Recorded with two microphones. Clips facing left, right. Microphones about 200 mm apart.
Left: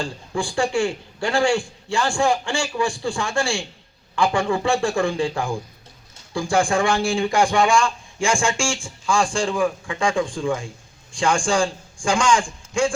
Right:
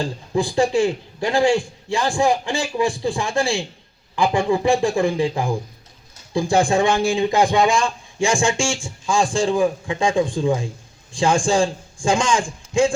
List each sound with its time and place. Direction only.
0.0 s a man's voice: 20° right (ahead or behind)